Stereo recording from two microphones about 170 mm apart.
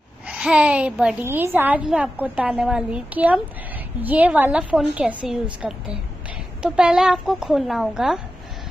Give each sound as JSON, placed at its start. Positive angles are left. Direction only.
{"t": 0.3, "sound": "a woman's voice", "side_deg": -5}